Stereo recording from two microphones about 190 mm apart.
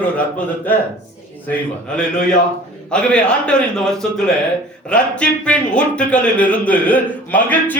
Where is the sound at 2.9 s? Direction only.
5° left (ahead or behind).